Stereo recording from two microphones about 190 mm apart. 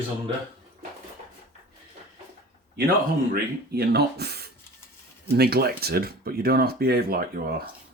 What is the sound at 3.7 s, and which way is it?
Speech, 55° right (ahead or behind).